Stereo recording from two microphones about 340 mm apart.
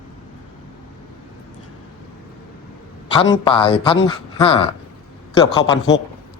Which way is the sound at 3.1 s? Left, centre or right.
Centre.